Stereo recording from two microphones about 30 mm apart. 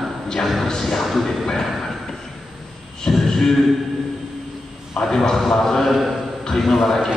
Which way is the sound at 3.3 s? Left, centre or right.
Centre.